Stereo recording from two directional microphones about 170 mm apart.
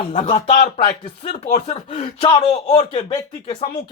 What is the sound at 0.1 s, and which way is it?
Speech, 40° left (ahead or behind).